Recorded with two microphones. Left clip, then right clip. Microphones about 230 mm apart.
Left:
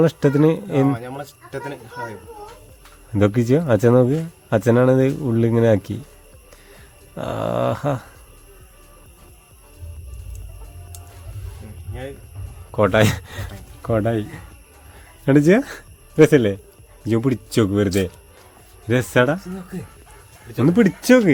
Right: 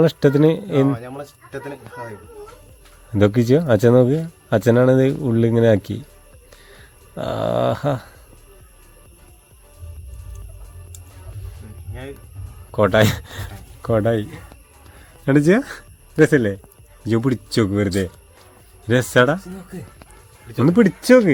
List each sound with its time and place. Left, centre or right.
0.0 s speech: centre
0.9 s speech: centre
3.1 s speech: centre
7.2 s speech: centre
12.7 s speech: centre
17.1 s speech: centre
18.9 s speech: centre
20.6 s speech: centre